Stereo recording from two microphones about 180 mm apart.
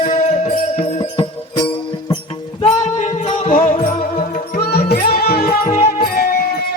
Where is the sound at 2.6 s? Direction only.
40° left (ahead or behind); by 6.5 s 55° left (ahead or behind).